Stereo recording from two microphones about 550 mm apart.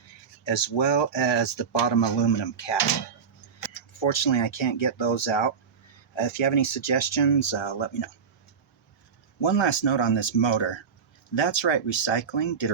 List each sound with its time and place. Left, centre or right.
0.4 s speech: left
9.4 s speech: left